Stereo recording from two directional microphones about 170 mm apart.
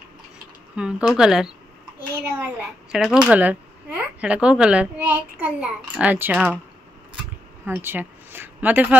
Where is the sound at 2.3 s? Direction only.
10° right (ahead or behind).